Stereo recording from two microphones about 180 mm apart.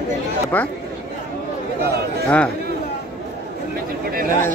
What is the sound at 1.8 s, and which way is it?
Speech, 60° right (ahead or behind).